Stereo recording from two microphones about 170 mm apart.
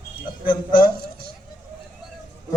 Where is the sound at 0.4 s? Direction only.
55° left (ahead or behind).